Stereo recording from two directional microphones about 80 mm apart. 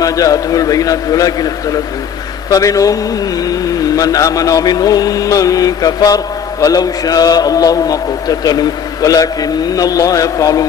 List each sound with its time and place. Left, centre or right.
0.0 s speech: left